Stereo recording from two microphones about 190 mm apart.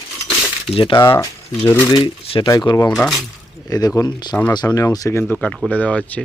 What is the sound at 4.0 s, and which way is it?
Speech, 20° left (ahead or behind).